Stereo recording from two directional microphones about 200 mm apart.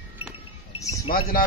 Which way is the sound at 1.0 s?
45° left (ahead or behind).